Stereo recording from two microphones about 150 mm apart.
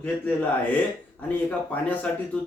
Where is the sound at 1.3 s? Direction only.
10° left (ahead or behind).